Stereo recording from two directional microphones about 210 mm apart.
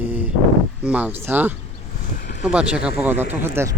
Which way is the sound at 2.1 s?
50° left (ahead or behind).